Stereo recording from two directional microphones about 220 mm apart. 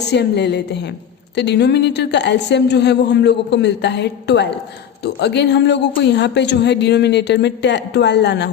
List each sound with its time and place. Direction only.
0.1 s speech: 50° left (ahead or behind)